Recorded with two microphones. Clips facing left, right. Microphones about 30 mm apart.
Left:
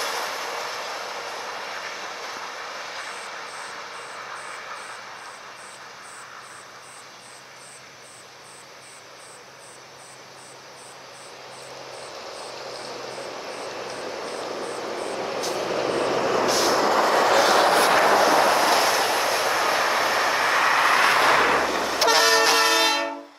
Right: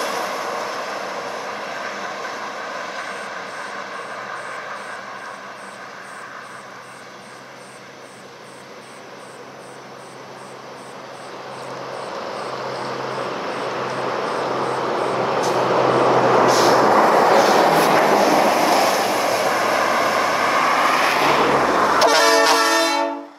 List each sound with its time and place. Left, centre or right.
0.0 s train: right
0.4 s train: centre
0.7 s vehicle: right
1.7 s vehicle: centre
11.7 s vehicle: right
12.9 s vehicle: right
17.2 s vehicle: right
20.2 s vehicle: centre
20.9 s vehicle: right
21.5 s vehicle: right
22.8 s train: centre